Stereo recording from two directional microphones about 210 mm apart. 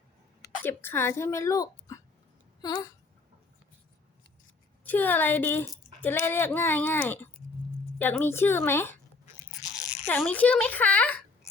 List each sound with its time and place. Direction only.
0.4 s speech: 10° left (ahead or behind)
4.9 s speech: 10° left (ahead or behind)